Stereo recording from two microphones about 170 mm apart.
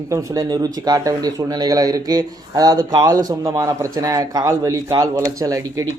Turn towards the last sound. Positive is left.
turn(degrees=-20)  # may be behind; listen again after turning